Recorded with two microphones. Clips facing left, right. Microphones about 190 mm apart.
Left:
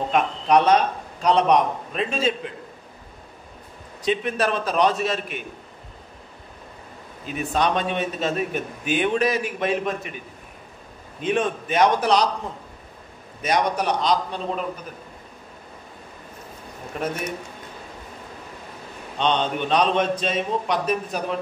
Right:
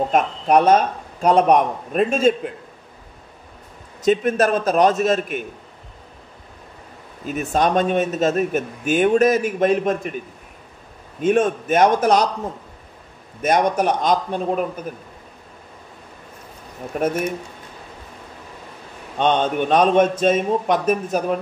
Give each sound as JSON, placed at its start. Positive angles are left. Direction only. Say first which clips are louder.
{"t": 0.1, "sound": "a man's voice", "louder": "right 1 dB", "side_deg": -50}
{"t": 4.0, "sound": "a man's voice", "louder": "right 6 dB", "side_deg": -45}
{"t": 7.2, "sound": "a man's voice", "louder": "right 3 dB", "side_deg": -45}
{"t": 11.1, "sound": "a man's voice", "louder": "right 6 dB", "side_deg": -45}
{"t": 13.4, "sound": "a man's voice", "louder": "right 5 dB", "side_deg": -50}
{"t": 16.9, "sound": "a man's voice", "louder": "right 7 dB", "side_deg": -45}
{"t": 19.1, "sound": "a man's voice", "louder": "right 4 dB", "side_deg": -50}